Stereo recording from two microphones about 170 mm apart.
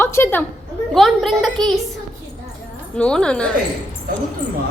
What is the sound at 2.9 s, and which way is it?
Speech, 5° left (ahead or behind).